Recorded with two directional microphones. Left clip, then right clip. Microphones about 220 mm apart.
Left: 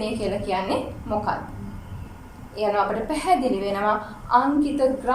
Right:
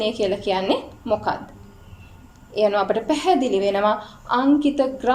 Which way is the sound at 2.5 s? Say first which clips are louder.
Right 3 dB; 40° right (ahead or behind).